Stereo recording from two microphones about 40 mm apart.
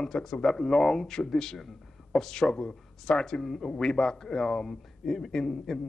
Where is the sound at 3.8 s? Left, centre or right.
Centre.